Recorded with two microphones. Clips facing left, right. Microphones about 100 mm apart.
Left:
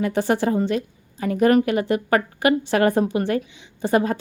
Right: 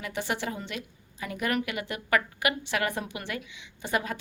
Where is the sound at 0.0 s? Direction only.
40° left (ahead or behind).